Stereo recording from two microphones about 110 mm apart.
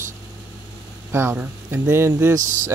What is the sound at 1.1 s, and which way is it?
Speech, 20° right (ahead or behind).